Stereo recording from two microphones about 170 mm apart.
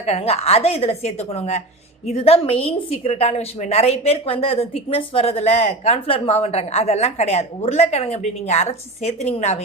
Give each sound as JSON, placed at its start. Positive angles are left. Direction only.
{"t": 0.0, "sound": "a woman's voice", "side_deg": 35}